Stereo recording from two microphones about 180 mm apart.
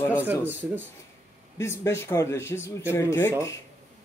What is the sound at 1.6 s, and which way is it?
Speech, 15° left (ahead or behind).